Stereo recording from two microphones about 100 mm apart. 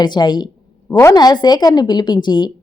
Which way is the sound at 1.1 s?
45° left (ahead or behind).